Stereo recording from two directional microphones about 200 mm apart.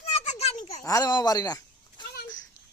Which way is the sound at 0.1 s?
35° left (ahead or behind).